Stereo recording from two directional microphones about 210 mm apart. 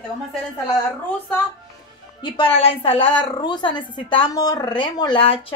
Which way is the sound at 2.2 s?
25° left (ahead or behind).